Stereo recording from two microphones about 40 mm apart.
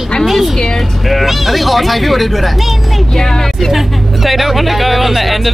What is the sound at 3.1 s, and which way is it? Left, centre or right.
Speech, centre.